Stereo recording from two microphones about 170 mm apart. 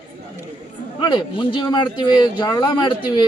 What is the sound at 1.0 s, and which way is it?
Speech, 30° left (ahead or behind).